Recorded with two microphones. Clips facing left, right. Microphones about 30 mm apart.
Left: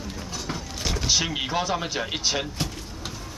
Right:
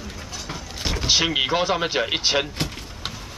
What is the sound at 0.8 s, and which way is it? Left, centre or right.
Speech, centre.